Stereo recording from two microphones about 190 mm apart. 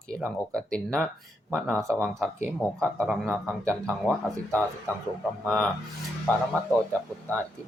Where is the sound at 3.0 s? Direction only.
Centre (ahead or behind).